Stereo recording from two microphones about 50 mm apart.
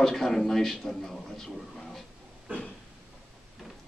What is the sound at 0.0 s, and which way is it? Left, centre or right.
A man's voice, centre.